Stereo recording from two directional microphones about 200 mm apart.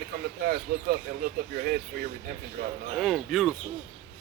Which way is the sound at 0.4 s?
50° right (ahead or behind).